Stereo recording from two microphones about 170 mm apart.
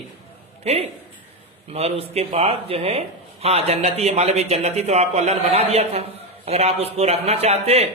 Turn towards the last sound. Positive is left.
turn(degrees=-35)  # may be behind; listen again after turning